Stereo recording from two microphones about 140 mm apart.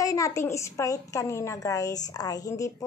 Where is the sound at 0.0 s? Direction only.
25° left (ahead or behind).